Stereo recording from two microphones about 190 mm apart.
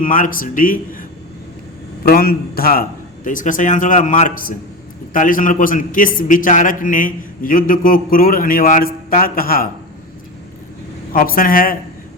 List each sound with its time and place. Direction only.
0.0 s a man's voice: 45° left (ahead or behind)
2.0 s a man's voice: 50° left (ahead or behind)
11.1 s a man's voice: 50° left (ahead or behind)